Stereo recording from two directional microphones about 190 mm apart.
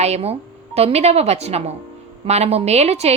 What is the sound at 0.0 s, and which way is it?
Speech, 35° right (ahead or behind).